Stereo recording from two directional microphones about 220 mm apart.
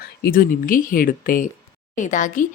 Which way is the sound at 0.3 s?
40° left (ahead or behind).